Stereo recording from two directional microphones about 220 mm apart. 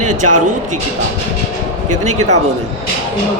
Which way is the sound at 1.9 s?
30° right (ahead or behind).